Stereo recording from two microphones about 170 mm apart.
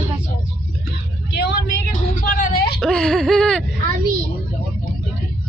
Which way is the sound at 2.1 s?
55° left (ahead or behind).